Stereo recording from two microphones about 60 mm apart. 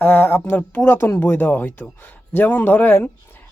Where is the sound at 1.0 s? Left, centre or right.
Left.